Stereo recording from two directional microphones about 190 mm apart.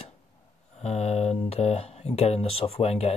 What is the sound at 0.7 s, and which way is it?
Speech, 35° left (ahead or behind).